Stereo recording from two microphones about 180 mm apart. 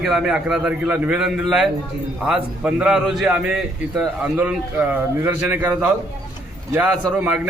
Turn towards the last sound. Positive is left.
turn(degrees=-5)  # may be behind; listen again after turning